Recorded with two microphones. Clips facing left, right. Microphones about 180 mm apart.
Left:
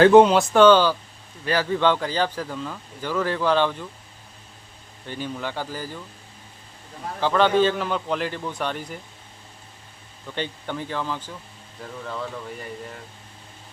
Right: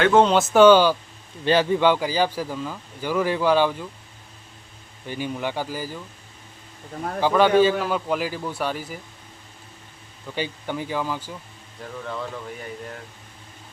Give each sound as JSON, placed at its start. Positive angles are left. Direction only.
{"t": 0.3, "sound": "speech", "side_deg": -5}
{"t": 1.8, "sound": "speech", "side_deg": -10}
{"t": 5.0, "sound": "speech", "side_deg": -10}
{"t": 7.2, "sound": "speech", "side_deg": -10}
{"t": 10.2, "sound": "speech", "side_deg": -5}